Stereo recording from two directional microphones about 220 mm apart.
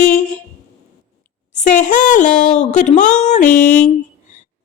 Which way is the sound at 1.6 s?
35° left (ahead or behind).